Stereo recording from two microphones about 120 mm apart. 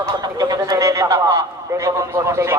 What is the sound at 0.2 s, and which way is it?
A man's voice, 30° right (ahead or behind).